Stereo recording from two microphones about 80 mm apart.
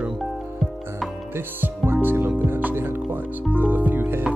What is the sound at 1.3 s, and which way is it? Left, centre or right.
Music, right.